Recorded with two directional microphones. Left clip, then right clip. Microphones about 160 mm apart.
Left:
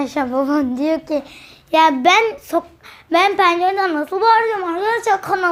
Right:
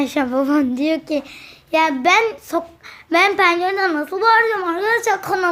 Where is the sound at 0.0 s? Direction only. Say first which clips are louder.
Even; 20° right (ahead or behind).